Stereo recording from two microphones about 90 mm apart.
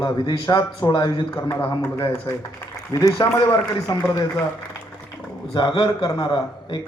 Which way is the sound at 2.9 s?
50° left (ahead or behind).